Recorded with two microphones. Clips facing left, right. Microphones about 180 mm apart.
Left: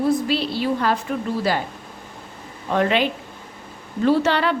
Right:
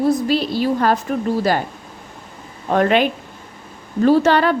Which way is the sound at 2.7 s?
50° right (ahead or behind).